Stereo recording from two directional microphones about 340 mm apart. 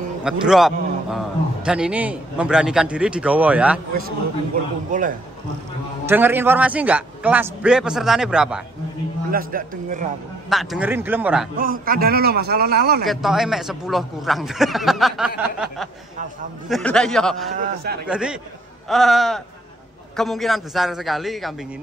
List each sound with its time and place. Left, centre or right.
0.2 s a man's voice: centre
4.9 s a man's voice: right
6.0 s a man's voice: centre
9.3 s a man's voice: right
10.5 s a man's voice: centre
11.5 s a man's voice: right
13.0 s a man's voice: centre
17.6 s a man's voice: right
18.0 s a man's voice: centre